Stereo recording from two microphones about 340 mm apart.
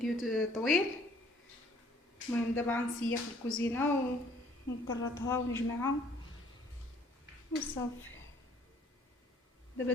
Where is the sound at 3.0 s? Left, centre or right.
Left.